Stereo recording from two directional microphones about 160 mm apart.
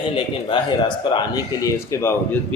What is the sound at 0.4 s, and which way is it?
Speech, 30° left (ahead or behind).